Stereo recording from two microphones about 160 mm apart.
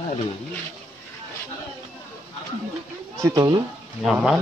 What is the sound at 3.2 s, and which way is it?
Speech, 20° right (ahead or behind).